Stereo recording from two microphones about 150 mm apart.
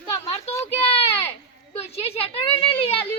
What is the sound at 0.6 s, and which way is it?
A child's voice, 45° left (ahead or behind).